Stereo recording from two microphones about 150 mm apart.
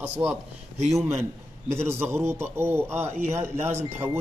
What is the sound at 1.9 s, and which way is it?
A man's voice, 15° right (ahead or behind).